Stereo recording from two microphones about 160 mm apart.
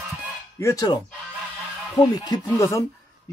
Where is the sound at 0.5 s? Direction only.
20° left (ahead or behind).